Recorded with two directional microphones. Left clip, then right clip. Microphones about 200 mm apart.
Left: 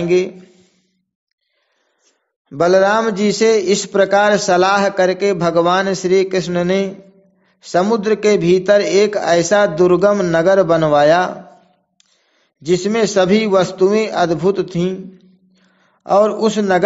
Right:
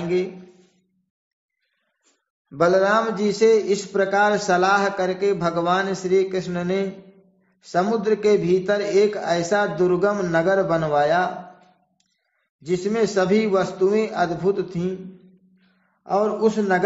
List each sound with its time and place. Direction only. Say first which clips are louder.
0.0 s a man's voice: left 8 dB; 45° left (ahead or behind)
2.5 s a man's voice: left 5 dB; 40° left (ahead or behind)
12.6 s a man's voice: left 6 dB; 45° left (ahead or behind)
16.0 s a man's voice: left 7 dB; 45° left (ahead or behind)